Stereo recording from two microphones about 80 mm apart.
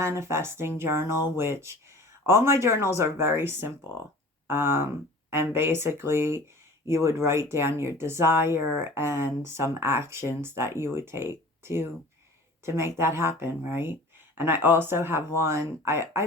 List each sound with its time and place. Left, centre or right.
0.0 s speech: right